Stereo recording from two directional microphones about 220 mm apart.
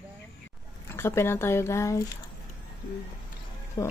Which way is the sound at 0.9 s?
10° left (ahead or behind).